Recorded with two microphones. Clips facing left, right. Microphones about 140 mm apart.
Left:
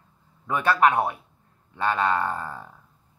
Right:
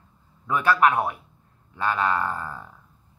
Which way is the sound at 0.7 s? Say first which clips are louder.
Even; 25° left (ahead or behind).